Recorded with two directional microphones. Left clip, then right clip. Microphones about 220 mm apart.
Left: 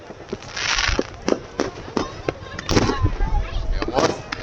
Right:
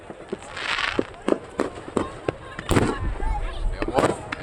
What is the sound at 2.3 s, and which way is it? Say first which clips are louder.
Fireworks: left 2 dB; 25° right (ahead or behind).